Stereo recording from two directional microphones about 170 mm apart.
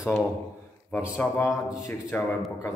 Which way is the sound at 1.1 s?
15° left (ahead or behind).